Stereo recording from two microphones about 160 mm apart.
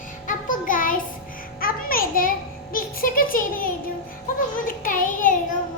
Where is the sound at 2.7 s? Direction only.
65° left (ahead or behind).